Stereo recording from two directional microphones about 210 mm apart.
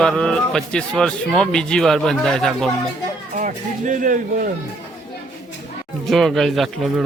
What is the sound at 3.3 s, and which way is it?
Speech, 40° right (ahead or behind).